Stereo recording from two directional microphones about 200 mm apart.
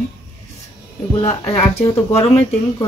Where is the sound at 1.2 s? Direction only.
30° left (ahead or behind).